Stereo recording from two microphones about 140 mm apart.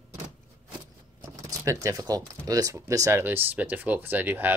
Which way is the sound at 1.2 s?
25° right (ahead or behind).